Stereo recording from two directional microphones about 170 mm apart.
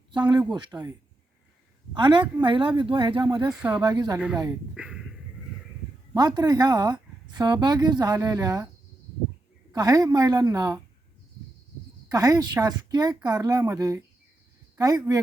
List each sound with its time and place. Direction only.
0.1 s a woman's voice: 25° right (ahead or behind)
3.5 s speech: 5° right (ahead or behind)
3.8 s speech: 25° right (ahead or behind)
4.7 s a sound: 5° right (ahead or behind)
6.1 s speech: 25° right (ahead or behind)
9.7 s speech: 20° right (ahead or behind)
12.1 s speech: 20° right (ahead or behind)